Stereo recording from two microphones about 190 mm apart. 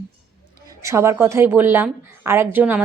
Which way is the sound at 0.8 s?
15° right (ahead or behind).